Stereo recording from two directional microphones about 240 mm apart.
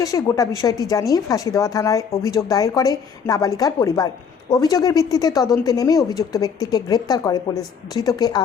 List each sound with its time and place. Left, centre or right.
0.0 s speech: centre